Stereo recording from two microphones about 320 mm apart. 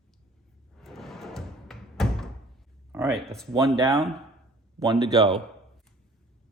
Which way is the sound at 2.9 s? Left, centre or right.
Centre.